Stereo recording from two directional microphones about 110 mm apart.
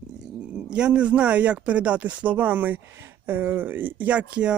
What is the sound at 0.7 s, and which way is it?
Speech, 10° right (ahead or behind).